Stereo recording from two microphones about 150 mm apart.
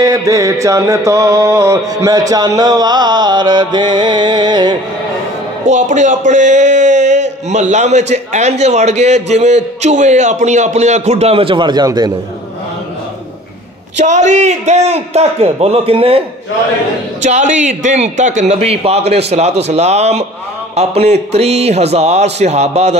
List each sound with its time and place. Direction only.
0.0 s mantra: 20° right (ahead or behind)
5.7 s speech: 55° right (ahead or behind); by 12.1 s 25° right (ahead or behind)
13.9 s speech: 50° right (ahead or behind)
17.2 s speech: 55° right (ahead or behind)